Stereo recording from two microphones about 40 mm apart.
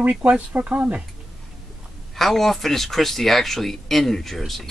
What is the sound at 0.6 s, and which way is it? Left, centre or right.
Speech, right.